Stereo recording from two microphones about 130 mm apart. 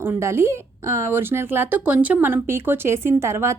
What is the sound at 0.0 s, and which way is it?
A woman's voice, 20° right (ahead or behind).